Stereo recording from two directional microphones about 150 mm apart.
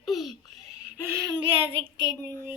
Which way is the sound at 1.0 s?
15° right (ahead or behind).